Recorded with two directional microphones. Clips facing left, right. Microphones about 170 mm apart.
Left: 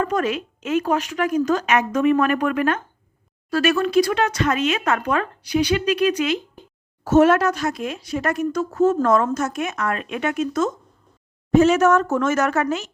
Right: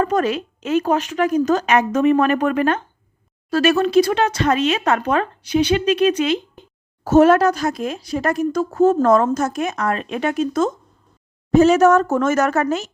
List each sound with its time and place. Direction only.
0.0 s speech: 35° right (ahead or behind)